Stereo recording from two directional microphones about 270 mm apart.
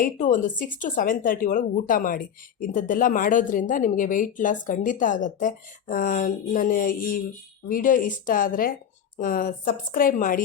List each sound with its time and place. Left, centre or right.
0.0 s a woman's voice: left